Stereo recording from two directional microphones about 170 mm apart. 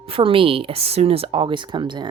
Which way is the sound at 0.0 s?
35° right (ahead or behind).